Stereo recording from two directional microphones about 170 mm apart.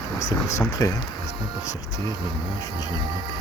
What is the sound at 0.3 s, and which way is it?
Speech, 20° left (ahead or behind).